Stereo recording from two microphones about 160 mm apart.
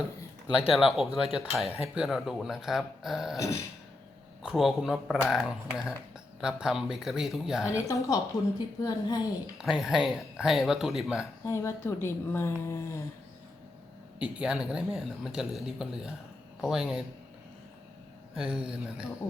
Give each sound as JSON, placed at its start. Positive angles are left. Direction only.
{"t": 0.5, "sound": "speech", "side_deg": -5}
{"t": 3.3, "sound": "a woman's voice", "side_deg": 20}
{"t": 4.4, "sound": "speech", "side_deg": 0}
{"t": 7.7, "sound": "a woman's voice", "side_deg": 20}
{"t": 9.6, "sound": "speech", "side_deg": -5}
{"t": 11.4, "sound": "a woman's voice", "side_deg": 15}
{"t": 14.2, "sound": "speech", "side_deg": -5}
{"t": 18.3, "sound": "speech", "side_deg": -5}